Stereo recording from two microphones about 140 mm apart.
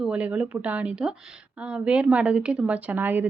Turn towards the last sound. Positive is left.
turn(degrees=-15)  # may be behind; listen again after turning